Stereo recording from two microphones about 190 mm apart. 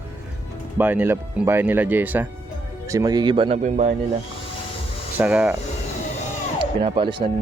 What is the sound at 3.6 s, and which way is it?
Speech, 35° right (ahead or behind).